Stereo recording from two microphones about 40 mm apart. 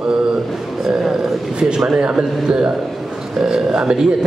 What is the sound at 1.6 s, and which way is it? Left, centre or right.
A man's voice, centre.